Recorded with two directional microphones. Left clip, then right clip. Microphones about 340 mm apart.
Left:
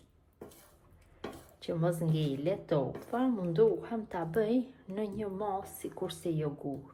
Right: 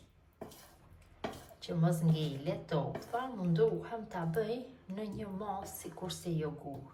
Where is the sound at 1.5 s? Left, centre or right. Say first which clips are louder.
Left 5 dB; left.